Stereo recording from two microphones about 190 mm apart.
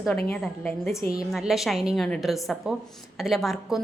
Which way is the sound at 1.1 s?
Centre (ahead or behind).